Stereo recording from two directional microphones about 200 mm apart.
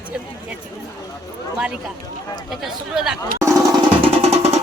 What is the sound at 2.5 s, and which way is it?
Speech, centre (ahead or behind).